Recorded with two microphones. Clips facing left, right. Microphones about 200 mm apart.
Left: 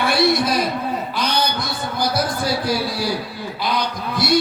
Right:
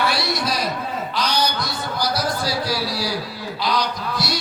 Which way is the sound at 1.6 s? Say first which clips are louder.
Left 2 dB; 55° left (ahead or behind).